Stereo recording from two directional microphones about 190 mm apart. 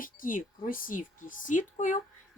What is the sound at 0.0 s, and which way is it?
Speech, 45° left (ahead or behind).